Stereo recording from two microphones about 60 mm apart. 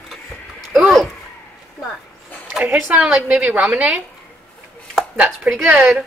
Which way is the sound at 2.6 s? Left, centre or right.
Right.